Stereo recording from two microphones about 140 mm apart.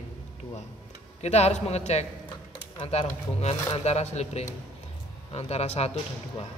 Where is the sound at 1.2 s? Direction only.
50° left (ahead or behind).